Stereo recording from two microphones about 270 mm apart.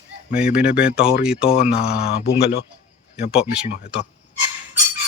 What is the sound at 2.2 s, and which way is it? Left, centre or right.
Speech, left.